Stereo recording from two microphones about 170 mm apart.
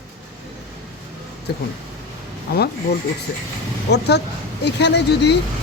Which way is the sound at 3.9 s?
80° left.